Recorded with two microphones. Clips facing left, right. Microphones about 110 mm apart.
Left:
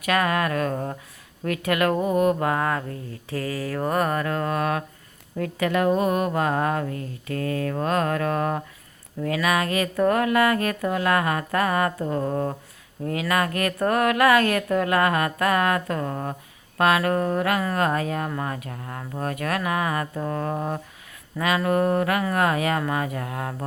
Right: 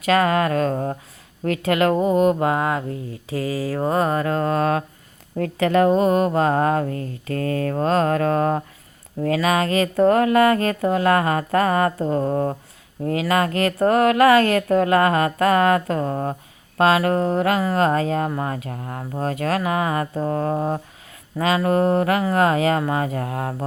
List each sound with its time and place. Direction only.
0.0 s speech: 30° right (ahead or behind)
5.9 s speech: 30° right (ahead or behind)